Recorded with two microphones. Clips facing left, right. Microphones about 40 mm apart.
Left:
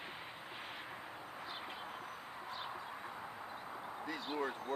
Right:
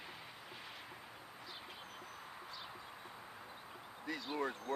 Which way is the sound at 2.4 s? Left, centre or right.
Left.